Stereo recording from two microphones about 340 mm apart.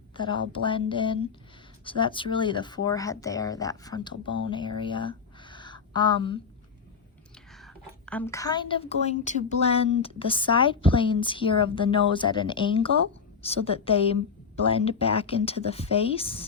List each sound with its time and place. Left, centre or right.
0.2 s a woman's voice: centre
7.6 s a woman's voice: centre